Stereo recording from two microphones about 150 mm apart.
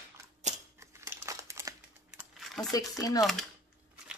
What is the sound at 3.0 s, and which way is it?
Speech, 25° left (ahead or behind).